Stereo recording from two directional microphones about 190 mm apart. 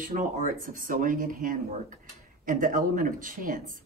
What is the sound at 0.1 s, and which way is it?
Speech, 40° right (ahead or behind).